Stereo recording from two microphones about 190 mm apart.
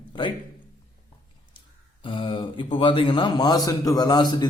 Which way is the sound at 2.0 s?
25° left (ahead or behind).